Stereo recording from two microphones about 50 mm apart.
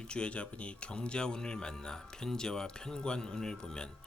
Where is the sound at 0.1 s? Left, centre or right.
Left.